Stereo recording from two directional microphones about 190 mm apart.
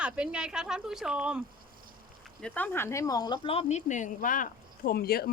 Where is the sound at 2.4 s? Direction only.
10° left (ahead or behind).